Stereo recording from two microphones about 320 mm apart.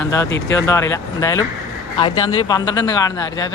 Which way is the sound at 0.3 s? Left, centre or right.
Left.